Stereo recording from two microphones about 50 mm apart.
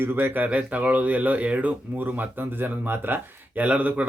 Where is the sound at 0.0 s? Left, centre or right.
Right.